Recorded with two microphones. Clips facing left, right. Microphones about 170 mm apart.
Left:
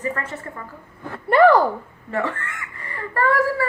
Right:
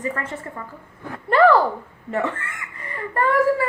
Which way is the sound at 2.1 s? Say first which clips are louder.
Even; 20° right (ahead or behind).